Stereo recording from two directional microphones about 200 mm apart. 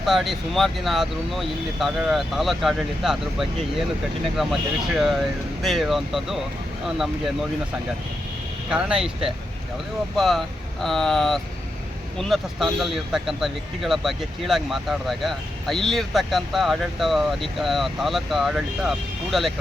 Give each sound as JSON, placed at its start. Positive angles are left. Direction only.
{"t": 0.0, "sound": "speech", "side_deg": 0}
{"t": 8.7, "sound": "speech", "side_deg": -5}